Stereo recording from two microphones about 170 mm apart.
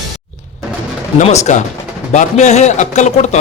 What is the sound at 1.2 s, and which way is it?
A man's voice, 40° left (ahead or behind).